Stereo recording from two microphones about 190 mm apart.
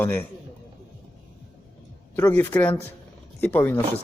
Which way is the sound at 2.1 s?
10° left (ahead or behind).